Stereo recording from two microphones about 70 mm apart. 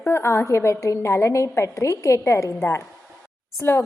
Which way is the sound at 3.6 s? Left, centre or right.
Left.